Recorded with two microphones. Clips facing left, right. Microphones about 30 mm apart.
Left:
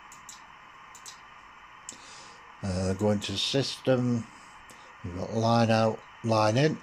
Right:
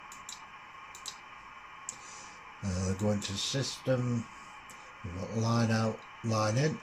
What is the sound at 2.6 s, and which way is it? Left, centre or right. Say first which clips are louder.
Speech: left 6 dB; left.